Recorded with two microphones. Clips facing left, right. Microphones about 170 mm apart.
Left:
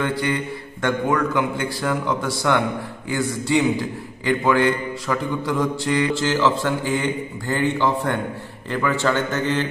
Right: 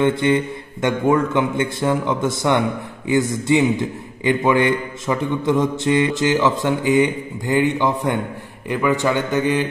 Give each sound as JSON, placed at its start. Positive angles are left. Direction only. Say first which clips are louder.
{"t": 0.0, "sound": "a man's voice", "louder": "right 6 dB", "side_deg": -20}